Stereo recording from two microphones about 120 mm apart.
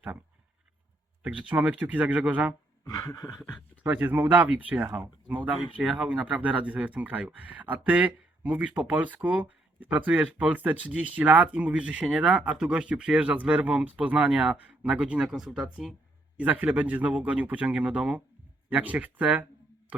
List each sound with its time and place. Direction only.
1.2 s speech: 10° right (ahead or behind)
2.8 s a sound: 30° left (ahead or behind)
3.8 s speech: 15° right (ahead or behind)